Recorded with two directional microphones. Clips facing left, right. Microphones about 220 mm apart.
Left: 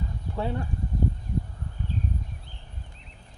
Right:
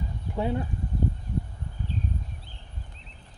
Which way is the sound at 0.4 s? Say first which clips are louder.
Right 2 dB; 15° right (ahead or behind).